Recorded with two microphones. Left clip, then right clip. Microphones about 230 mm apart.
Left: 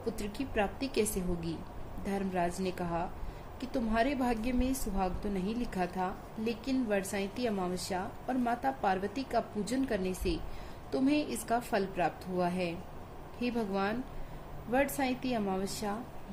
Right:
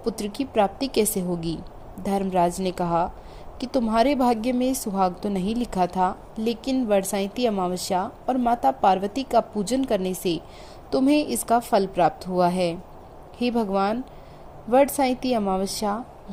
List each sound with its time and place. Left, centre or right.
0.0 s a woman's voice: right